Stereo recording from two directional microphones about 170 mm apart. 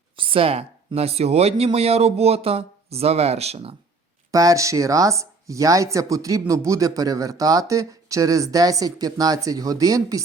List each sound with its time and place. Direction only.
0.2 s speech: 30° right (ahead or behind)
4.3 s speech: 20° right (ahead or behind)